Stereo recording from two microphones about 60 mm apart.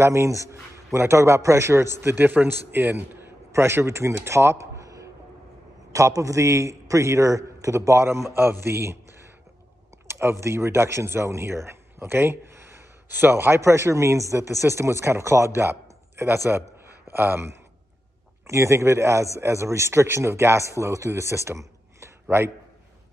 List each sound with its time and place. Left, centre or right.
0.0 s a man's voice: right
4.1 s a sound: right
5.9 s a man's voice: right
8.4 s a man's voice: right
10.0 s a man's voice: right
18.5 s a man's voice: right